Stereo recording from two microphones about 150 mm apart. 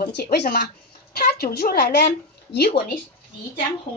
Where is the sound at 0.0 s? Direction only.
90° left.